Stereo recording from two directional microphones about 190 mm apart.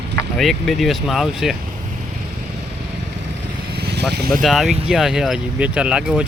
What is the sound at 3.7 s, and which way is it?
Vehicle, 60° right (ahead or behind).